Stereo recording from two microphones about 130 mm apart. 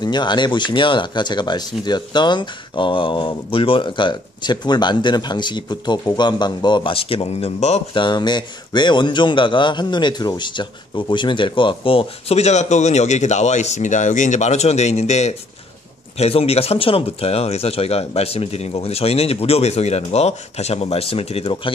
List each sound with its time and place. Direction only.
0.0 s a man's voice: 35° left (ahead or behind); by 7.8 s 55° left (ahead or behind)
7.9 s a man's voice: 35° left (ahead or behind)
12.4 s speech: 60° left (ahead or behind)